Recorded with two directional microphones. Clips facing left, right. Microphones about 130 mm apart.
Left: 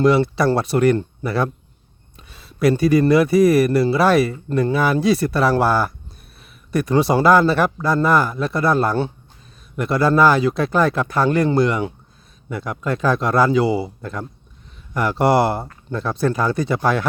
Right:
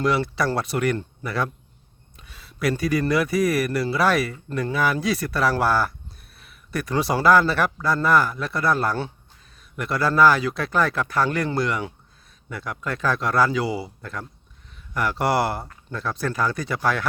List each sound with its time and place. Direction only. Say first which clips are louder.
0.0 s speech: left 7 dB; 25° left (ahead or behind)